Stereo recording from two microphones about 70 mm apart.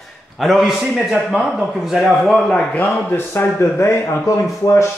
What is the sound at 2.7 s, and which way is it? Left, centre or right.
A man's voice, left.